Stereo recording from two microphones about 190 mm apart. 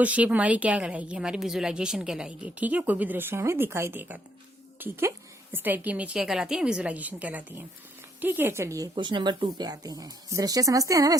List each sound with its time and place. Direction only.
0.0 s a woman's voice: 5° right (ahead or behind)